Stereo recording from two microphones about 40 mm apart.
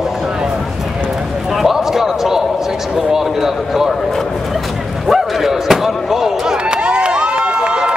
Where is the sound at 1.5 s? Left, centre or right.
Centre.